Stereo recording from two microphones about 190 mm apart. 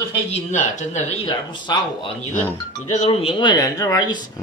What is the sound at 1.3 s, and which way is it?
Speech, 25° left (ahead or behind).